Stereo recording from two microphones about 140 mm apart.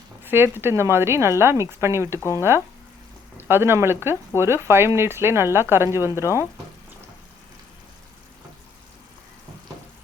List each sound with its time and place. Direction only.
0.3 s speech: 15° right (ahead or behind)
3.5 s speech: 15° right (ahead or behind)